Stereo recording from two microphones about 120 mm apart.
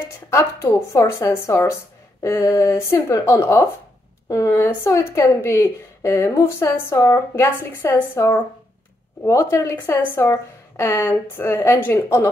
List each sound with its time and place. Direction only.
0.3 s a woman's voice: 25° left (ahead or behind)